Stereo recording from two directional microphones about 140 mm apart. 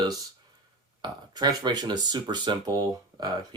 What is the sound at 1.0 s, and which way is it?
Speech, 30° right (ahead or behind).